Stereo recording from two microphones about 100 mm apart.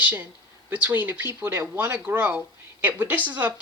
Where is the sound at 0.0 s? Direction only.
15° right (ahead or behind).